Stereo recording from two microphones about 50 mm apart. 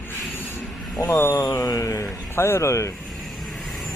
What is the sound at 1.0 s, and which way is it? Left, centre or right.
Speech, left.